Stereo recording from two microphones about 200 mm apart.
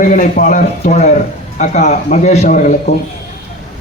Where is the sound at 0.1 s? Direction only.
40° left (ahead or behind).